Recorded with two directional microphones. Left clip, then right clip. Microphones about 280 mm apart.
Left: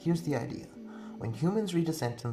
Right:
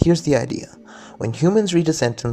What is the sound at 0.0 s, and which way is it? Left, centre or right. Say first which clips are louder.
Speech: right 15 dB; right.